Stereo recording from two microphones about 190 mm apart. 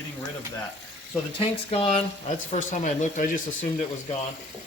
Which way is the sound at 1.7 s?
35° left (ahead or behind).